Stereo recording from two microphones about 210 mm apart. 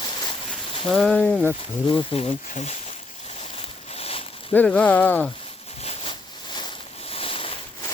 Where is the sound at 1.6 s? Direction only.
25° left (ahead or behind).